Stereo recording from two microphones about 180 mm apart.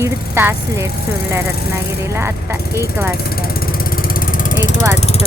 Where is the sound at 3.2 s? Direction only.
55° left (ahead or behind).